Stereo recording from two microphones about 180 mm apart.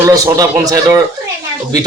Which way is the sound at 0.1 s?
20° right (ahead or behind).